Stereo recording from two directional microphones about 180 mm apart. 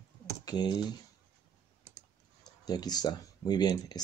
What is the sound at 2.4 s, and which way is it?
Speech, 20° left (ahead or behind).